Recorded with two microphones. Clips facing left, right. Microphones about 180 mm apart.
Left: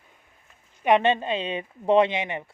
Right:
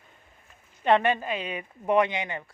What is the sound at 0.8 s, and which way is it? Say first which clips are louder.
Speech: left 2 dB; 20° left (ahead or behind).